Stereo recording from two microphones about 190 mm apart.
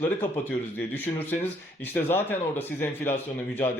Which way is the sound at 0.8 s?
10° left (ahead or behind).